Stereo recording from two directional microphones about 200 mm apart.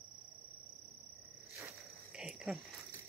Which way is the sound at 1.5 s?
5° right (ahead or behind).